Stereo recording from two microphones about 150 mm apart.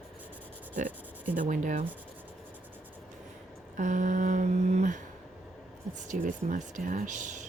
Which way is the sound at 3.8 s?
60° right (ahead or behind).